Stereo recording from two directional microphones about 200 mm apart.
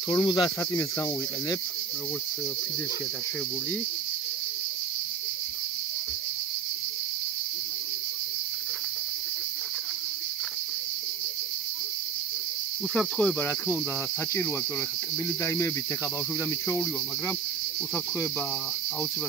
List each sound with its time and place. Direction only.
0.1 s cricket: 20° left (ahead or behind)
12.9 s cricket: 5° left (ahead or behind)
15.2 s cricket: 10° left (ahead or behind)